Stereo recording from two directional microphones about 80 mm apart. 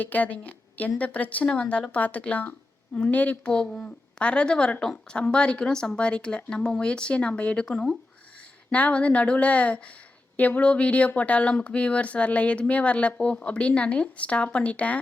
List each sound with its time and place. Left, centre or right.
0.0 s a woman's voice: left
8.7 s a woman's voice: centre